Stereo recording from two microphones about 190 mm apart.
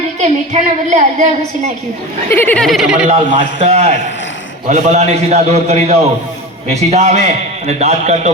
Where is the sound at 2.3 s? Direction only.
10° left (ahead or behind).